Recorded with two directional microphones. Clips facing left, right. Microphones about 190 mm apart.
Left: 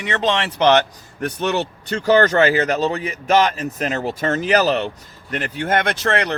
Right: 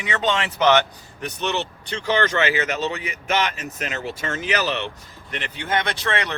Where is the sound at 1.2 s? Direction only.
50° left (ahead or behind).